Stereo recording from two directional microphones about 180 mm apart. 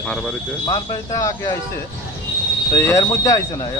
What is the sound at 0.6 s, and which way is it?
Speech, 20° left (ahead or behind).